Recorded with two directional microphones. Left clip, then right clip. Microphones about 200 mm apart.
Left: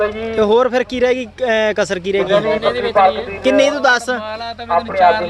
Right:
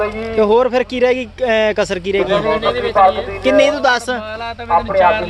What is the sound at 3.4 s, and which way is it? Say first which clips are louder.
Speech: even; 10° left (ahead or behind).